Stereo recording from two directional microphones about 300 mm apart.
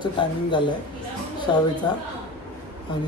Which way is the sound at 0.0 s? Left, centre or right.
Centre.